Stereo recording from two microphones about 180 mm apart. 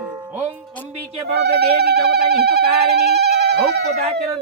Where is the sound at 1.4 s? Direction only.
65° right (ahead or behind).